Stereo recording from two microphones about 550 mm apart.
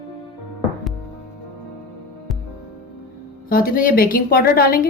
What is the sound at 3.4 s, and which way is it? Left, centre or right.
A woman's voice, centre.